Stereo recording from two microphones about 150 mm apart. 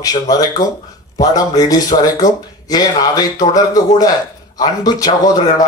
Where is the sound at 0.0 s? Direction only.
25° left (ahead or behind).